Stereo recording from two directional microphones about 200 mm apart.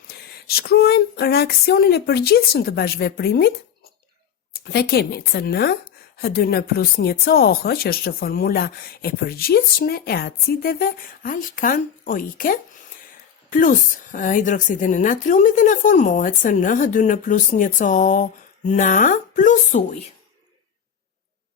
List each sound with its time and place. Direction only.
0.1 s speech: 55° left (ahead or behind)
4.6 s a woman's voice: 50° left (ahead or behind)